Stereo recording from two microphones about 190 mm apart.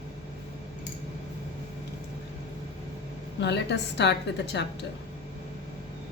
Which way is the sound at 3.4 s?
65° left (ahead or behind).